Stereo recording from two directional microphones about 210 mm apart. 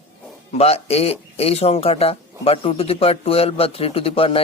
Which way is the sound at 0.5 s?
30° left (ahead or behind).